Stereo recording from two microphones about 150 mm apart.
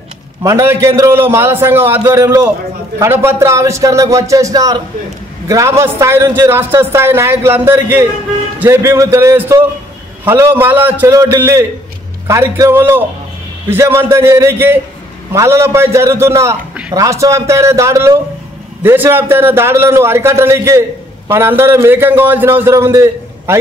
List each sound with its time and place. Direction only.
0.4 s a man's voice: 20° right (ahead or behind)